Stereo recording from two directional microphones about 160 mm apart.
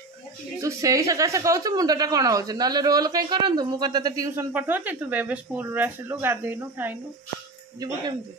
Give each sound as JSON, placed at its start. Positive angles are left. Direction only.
{"t": 0.6, "sound": "a woman's voice", "side_deg": -20}